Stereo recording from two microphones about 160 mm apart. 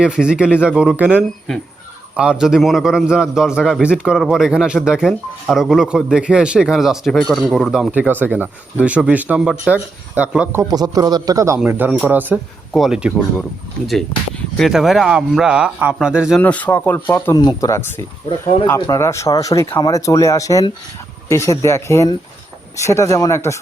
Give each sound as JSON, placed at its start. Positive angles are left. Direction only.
{"t": 0.0, "sound": "a man's voice", "side_deg": -5}
{"t": 10.6, "sound": "a man's voice", "side_deg": -25}
{"t": 11.6, "sound": "a man's voice", "side_deg": -10}
{"t": 14.5, "sound": "a man's voice", "side_deg": 0}
{"t": 16.4, "sound": "speech", "side_deg": 10}
{"t": 17.3, "sound": "speech", "side_deg": 25}
{"t": 18.3, "sound": "speech", "side_deg": 35}
{"t": 18.7, "sound": "speech", "side_deg": 20}